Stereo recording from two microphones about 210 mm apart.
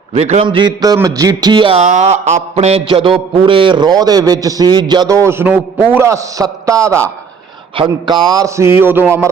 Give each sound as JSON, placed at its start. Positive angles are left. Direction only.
{"t": 0.1, "sound": "a man's voice", "side_deg": -30}